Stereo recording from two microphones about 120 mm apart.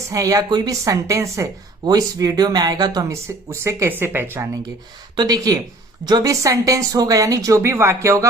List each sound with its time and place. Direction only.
0.1 s speech: 30° right (ahead or behind)
5.1 s speech: 30° right (ahead or behind)